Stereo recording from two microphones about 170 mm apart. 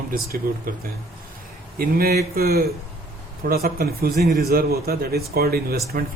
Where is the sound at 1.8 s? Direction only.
60° right (ahead or behind).